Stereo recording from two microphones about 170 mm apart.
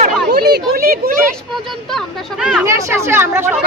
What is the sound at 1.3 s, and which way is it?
Speech, centre (ahead or behind).